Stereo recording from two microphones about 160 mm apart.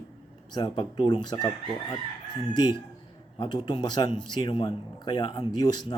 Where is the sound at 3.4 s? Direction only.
30° left (ahead or behind).